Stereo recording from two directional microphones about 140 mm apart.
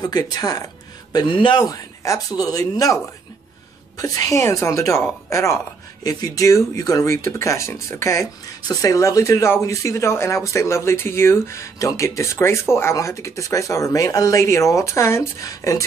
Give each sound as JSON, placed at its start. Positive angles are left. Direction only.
{"t": 0.0, "sound": "speech", "side_deg": 25}
{"t": 4.0, "sound": "speech", "side_deg": 25}